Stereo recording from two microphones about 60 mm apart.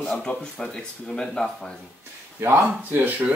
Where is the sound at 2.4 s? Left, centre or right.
Right.